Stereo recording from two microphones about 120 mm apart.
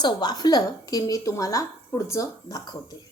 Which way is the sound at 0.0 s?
35° left (ahead or behind).